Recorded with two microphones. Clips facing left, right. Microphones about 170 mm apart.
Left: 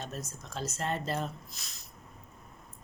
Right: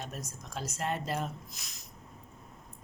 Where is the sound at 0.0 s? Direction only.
10° right (ahead or behind).